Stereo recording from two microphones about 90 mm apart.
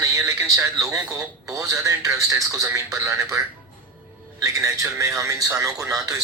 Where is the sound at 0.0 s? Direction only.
40° right (ahead or behind).